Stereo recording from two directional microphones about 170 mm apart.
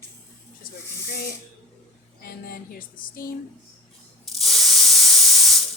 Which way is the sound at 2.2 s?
60° left (ahead or behind).